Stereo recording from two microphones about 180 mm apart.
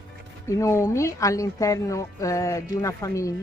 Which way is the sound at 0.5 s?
15° left (ahead or behind).